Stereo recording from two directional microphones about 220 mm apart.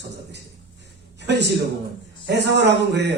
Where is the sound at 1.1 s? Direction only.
50° right (ahead or behind).